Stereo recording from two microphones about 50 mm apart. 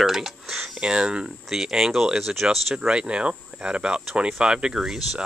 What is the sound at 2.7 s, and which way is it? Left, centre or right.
Speech, centre.